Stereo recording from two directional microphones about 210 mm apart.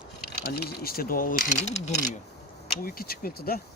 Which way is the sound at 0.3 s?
50° left (ahead or behind).